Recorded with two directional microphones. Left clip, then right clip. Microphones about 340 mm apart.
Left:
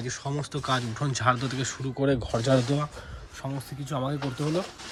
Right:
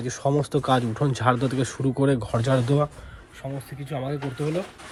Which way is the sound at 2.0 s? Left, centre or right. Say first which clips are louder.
Even; centre.